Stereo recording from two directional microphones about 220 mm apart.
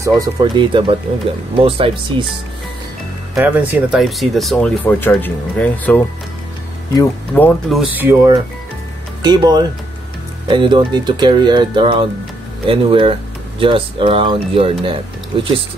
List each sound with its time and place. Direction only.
0.0 s speech: 20° right (ahead or behind)
3.3 s speech: 10° right (ahead or behind); by 15.0 s 25° right (ahead or behind)